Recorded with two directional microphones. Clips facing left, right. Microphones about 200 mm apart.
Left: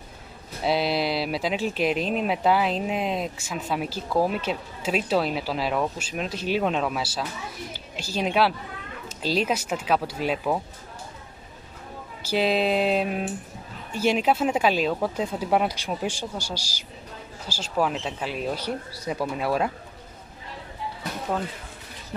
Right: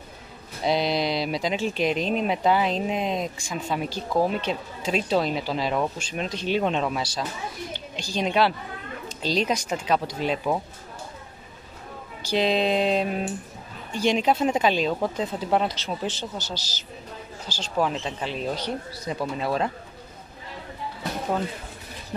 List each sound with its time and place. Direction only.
0.7 s a woman's voice: 5° left (ahead or behind)
12.2 s speech: 5° left (ahead or behind)